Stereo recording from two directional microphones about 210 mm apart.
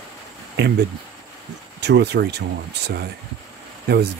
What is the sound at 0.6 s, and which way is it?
Speech, 50° right (ahead or behind).